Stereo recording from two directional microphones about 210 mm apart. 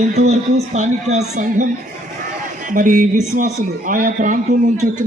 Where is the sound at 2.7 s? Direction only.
40° right (ahead or behind).